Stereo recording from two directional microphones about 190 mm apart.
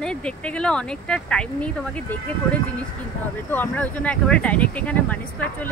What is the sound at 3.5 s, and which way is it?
Speech, 10° left (ahead or behind).